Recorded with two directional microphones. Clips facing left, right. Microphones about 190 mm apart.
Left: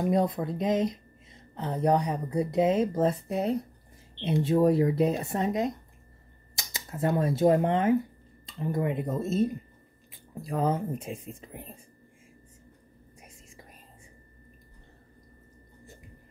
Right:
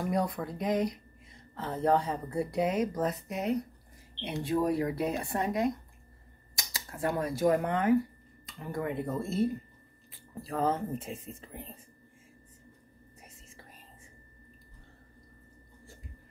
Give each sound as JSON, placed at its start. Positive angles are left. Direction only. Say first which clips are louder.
{"t": 0.0, "sound": "speech", "louder": "left 5 dB", "side_deg": 25}